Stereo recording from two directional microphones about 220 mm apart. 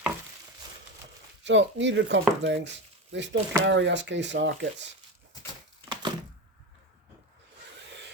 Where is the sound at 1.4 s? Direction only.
55° right (ahead or behind).